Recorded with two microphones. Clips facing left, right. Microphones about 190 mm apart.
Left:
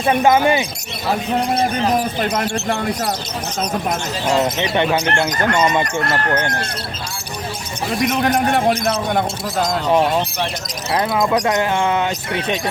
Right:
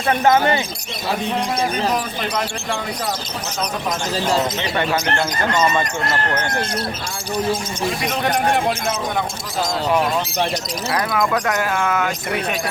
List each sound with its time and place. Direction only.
0.0 s speech: 15° left (ahead or behind)
2.2 s speech: 45° left (ahead or behind)
4.7 s speech: 20° left (ahead or behind)
8.2 s a man's voice: 45° left (ahead or behind); by 12.1 s 25° left (ahead or behind)